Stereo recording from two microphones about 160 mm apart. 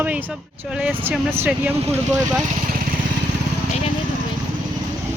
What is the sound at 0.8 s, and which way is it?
Speech, 5° right (ahead or behind).